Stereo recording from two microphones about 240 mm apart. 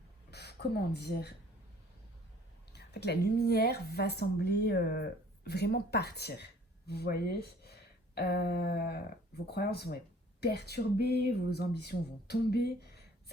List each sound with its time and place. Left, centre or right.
0.3 s speech: left
2.7 s a woman's voice: left